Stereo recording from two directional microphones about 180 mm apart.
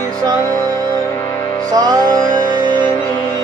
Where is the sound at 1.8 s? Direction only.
20° right (ahead or behind).